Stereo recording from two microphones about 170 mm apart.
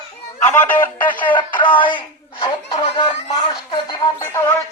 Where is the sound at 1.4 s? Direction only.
30° left (ahead or behind).